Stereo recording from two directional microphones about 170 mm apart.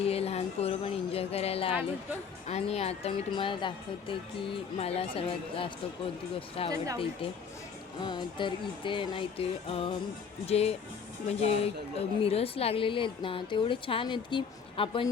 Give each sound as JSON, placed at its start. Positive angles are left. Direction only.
{"t": 0.0, "sound": "a woman's voice", "side_deg": 35}
{"t": 8.0, "sound": "music", "side_deg": 25}
{"t": 10.4, "sound": "a woman's voice", "side_deg": 35}